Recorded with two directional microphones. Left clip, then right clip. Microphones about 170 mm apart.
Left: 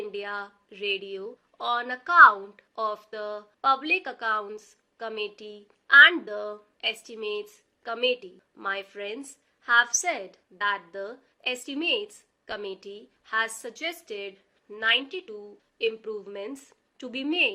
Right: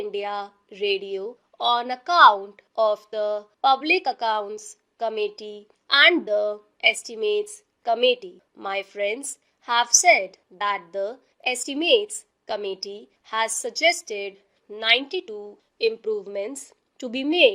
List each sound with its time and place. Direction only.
0.1 s speech: 35° right (ahead or behind)